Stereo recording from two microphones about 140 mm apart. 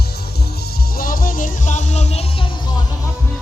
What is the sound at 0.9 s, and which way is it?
Music, 90° left.